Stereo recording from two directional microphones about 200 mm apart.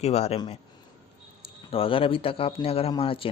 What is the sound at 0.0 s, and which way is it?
Speech, 30° left (ahead or behind).